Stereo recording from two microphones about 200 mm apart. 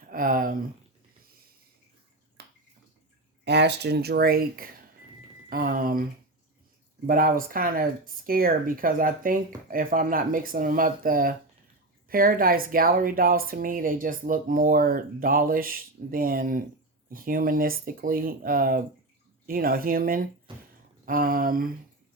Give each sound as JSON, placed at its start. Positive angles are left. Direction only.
{"t": 0.1, "sound": "speech", "side_deg": -45}
{"t": 2.4, "sound": "finger snapping", "side_deg": -55}
{"t": 3.4, "sound": "a woman's voice", "side_deg": -55}
{"t": 7.1, "sound": "a woman's voice", "side_deg": -45}
{"t": 20.5, "sound": "a sound", "side_deg": -25}
{"t": 21.0, "sound": "a woman's voice", "side_deg": -45}